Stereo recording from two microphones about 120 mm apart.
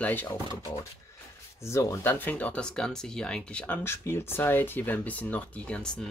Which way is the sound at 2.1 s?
15° left (ahead or behind).